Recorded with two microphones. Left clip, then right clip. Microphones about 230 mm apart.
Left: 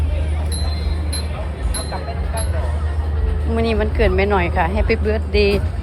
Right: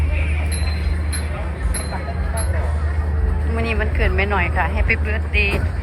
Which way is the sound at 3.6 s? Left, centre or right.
Left.